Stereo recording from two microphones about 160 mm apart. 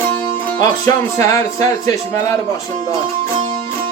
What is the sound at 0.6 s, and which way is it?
Speech, 20° left (ahead or behind).